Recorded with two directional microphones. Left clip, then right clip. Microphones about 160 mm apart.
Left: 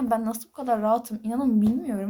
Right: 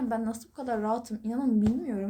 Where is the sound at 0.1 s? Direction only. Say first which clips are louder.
Left 6 dB; 15° left (ahead or behind).